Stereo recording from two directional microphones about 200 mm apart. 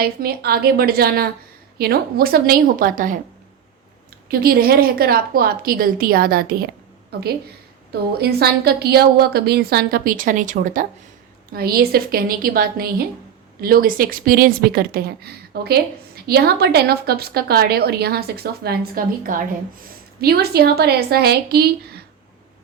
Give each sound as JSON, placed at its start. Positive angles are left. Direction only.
{"t": 0.0, "sound": "a woman's voice", "side_deg": -50}
{"t": 4.3, "sound": "a woman's voice", "side_deg": -50}
{"t": 8.2, "sound": "a woman's voice", "side_deg": -50}